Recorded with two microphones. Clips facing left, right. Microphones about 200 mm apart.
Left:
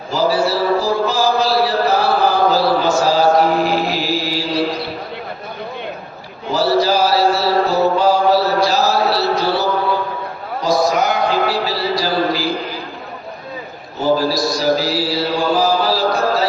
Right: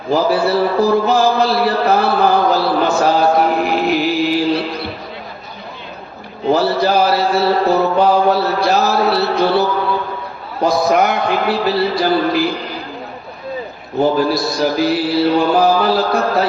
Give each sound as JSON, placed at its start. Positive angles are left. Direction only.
{"t": 0.1, "sound": "mantra", "side_deg": -60}
{"t": 6.5, "sound": "mantra", "side_deg": -60}
{"t": 10.6, "sound": "a sound", "side_deg": -60}
{"t": 14.2, "sound": "mantra", "side_deg": -55}